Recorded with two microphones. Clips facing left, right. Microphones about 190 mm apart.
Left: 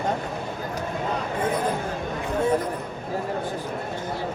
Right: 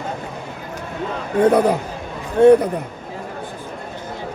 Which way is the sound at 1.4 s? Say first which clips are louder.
Right 13 dB; 70° right (ahead or behind).